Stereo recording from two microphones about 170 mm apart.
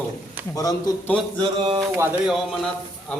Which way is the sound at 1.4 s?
30° right (ahead or behind).